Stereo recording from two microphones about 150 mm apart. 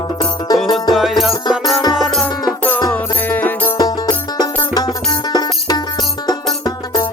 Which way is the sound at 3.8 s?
25° left (ahead or behind).